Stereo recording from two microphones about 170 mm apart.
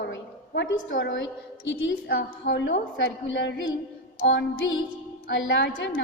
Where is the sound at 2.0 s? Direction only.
75° left (ahead or behind).